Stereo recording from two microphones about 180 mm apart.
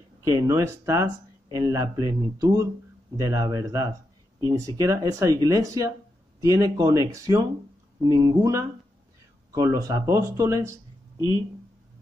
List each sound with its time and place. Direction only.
0.2 s speech: 15° right (ahead or behind)